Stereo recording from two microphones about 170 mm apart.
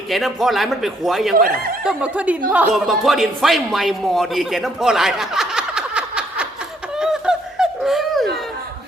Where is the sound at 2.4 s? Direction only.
10° right (ahead or behind).